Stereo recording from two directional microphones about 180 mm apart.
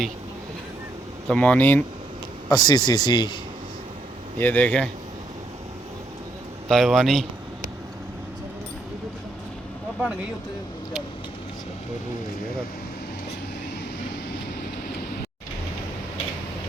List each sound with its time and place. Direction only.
1.3 s speech: 5° left (ahead or behind)
2.5 s speech: 20° left (ahead or behind)
4.4 s speech: 10° left (ahead or behind)
6.7 s speech: centre (ahead or behind)